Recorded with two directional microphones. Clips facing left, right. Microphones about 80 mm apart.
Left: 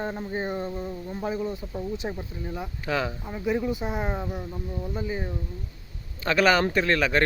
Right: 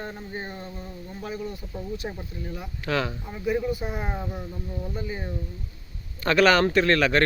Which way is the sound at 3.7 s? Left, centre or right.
Left.